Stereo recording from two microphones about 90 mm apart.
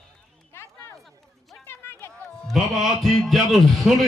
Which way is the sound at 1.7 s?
25° left (ahead or behind).